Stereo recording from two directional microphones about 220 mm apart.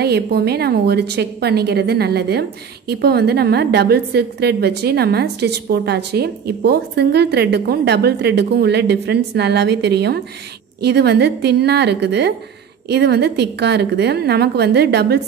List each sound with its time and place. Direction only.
0.0 s a woman's voice: 45° right (ahead or behind)